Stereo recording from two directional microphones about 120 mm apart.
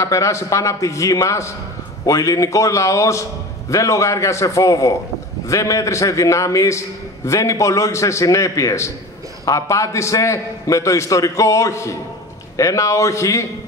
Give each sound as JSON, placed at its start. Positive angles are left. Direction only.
{"t": 0.0, "sound": "a man's voice", "side_deg": 25}